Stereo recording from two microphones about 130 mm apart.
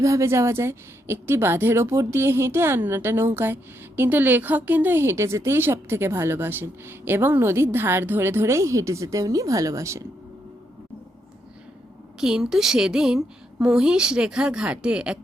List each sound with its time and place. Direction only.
0.0 s a woman's voice: 25° right (ahead or behind)
12.2 s a woman's voice: 5° right (ahead or behind)